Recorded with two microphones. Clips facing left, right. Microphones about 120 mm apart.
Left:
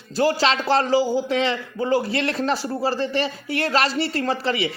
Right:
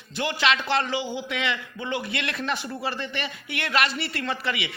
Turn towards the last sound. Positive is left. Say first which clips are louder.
# left 6 dB
turn(degrees=30)  # may be behind; listen again after turning